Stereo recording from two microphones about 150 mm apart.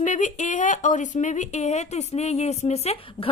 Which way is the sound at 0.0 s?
55° left (ahead or behind).